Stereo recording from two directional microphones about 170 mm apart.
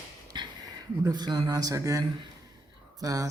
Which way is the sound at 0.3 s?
25° right (ahead or behind).